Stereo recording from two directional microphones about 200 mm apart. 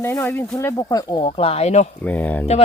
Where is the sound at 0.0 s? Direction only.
10° left (ahead or behind); by 1.9 s 35° left (ahead or behind).